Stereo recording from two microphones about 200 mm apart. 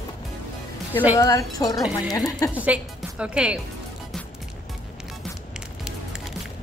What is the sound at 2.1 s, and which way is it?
Speech, 15° left (ahead or behind).